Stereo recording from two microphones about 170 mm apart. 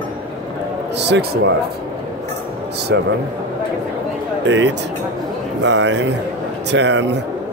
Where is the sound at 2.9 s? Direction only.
90° right.